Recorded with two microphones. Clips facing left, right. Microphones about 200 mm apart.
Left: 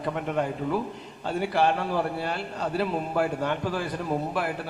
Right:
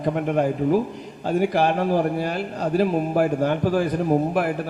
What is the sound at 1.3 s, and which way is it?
A man's voice, 40° right (ahead or behind).